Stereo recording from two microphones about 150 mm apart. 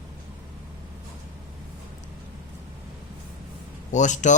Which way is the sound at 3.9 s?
55° left (ahead or behind).